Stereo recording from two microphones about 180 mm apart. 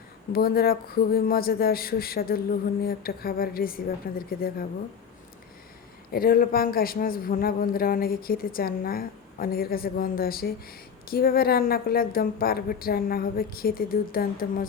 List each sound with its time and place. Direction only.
0.3 s a man's voice: 55° left (ahead or behind)
6.1 s a man's voice: 55° left (ahead or behind)